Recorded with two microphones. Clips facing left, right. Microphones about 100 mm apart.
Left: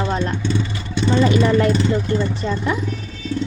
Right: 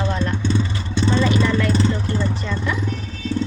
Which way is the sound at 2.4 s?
35° left (ahead or behind).